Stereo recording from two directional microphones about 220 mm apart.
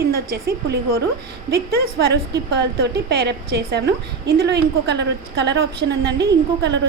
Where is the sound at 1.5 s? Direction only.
45° right (ahead or behind).